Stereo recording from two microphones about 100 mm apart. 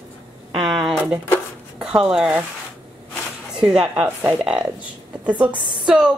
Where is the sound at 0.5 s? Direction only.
10° right (ahead or behind).